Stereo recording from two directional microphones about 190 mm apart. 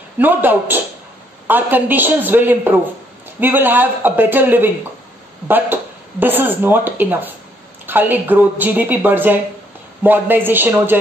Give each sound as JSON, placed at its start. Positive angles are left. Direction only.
{"t": 0.2, "sound": "a woman's voice", "side_deg": -10}